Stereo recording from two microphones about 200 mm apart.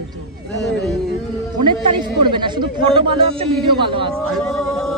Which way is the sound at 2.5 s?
25° right (ahead or behind).